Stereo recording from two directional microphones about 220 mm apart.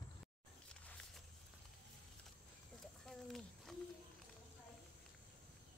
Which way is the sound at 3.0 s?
Centre (ahead or behind).